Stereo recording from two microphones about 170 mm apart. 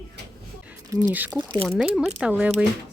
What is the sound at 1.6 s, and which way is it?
Speech, centre (ahead or behind).